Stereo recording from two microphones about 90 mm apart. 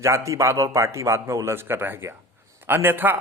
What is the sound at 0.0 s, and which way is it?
A man's voice, 35° right (ahead or behind).